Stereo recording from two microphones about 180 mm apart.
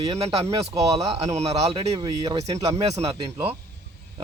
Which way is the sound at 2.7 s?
35° right (ahead or behind).